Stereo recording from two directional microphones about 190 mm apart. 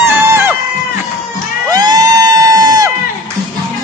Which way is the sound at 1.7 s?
20° right (ahead or behind).